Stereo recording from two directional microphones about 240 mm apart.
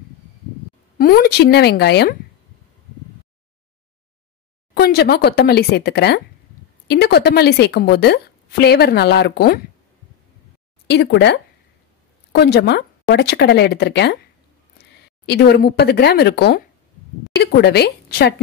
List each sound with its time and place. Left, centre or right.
0.9 s speech: left
4.7 s a woman's voice: left
10.9 s a woman's voice: left